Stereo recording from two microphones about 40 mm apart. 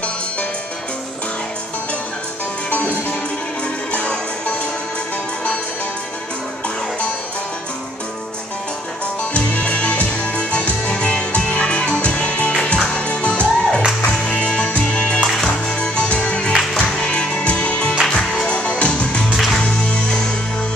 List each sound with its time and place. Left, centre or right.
3.9 s music: left
9.3 s music: left; by 18.5 s centre
18.5 s music: left